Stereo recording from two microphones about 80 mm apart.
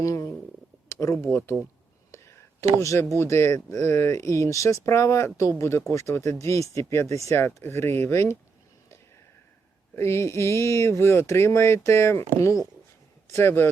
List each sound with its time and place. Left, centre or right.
0.0 s a sound: left
0.9 s speech: left
2.1 s whispering: left
2.8 s speech: left
9.9 s speech: left